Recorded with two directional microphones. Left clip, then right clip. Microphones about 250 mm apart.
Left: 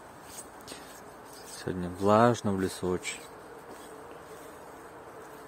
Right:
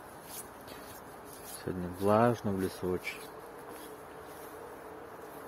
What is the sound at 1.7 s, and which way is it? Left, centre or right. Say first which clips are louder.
Speech: left 4 dB; centre.